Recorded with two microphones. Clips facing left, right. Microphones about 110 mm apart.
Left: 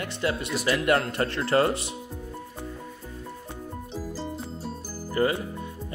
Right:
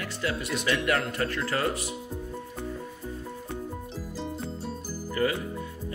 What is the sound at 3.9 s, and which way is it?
Music, centre (ahead or behind).